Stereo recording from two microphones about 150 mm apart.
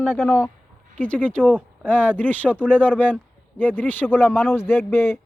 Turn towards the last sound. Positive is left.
turn(degrees=15)  # may be behind; listen again after turning